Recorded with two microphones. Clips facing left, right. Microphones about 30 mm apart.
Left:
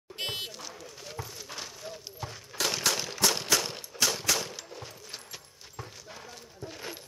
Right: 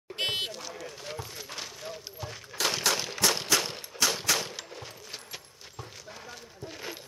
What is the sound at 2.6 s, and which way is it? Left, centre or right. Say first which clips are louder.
Gunshot: right 1 dB; centre.